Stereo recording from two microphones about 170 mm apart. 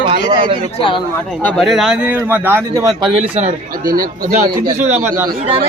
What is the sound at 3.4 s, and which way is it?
Speech, 50° right (ahead or behind).